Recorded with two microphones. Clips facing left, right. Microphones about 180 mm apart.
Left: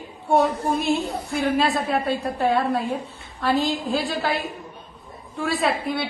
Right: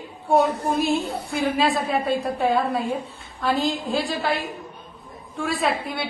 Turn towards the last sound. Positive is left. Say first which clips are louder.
# left 1 dB
turn(degrees=0)  # may be behind; listen again after turning